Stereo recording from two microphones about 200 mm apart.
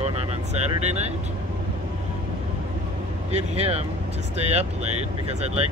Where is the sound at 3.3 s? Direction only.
30° right (ahead or behind).